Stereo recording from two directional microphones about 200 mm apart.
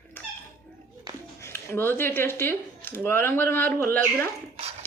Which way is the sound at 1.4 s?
10° left (ahead or behind).